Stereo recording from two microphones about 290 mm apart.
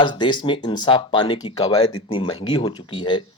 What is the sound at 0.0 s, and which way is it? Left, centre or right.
Speech, centre.